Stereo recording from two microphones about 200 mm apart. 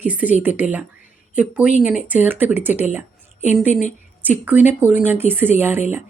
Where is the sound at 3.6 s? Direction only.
40° left (ahead or behind).